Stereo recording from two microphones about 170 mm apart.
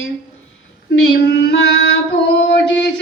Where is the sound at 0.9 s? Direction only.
80° left.